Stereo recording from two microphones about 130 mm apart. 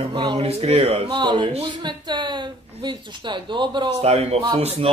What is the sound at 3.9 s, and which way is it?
Speech, 55° right (ahead or behind).